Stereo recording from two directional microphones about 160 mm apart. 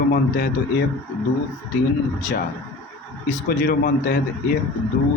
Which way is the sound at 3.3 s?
65° left (ahead or behind).